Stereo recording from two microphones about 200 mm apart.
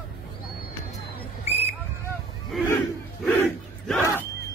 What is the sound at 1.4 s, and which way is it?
Hubbub, 30° left (ahead or behind).